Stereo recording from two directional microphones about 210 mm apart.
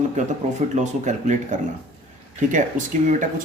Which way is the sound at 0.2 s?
35° right (ahead or behind).